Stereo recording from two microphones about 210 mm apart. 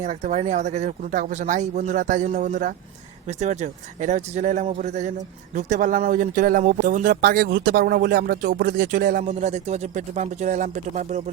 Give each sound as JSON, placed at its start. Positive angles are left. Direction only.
{"t": 0.0, "sound": "speech", "side_deg": -35}